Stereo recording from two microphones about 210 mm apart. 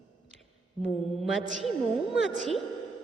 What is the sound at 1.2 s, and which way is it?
A woman's voice, centre (ahead or behind).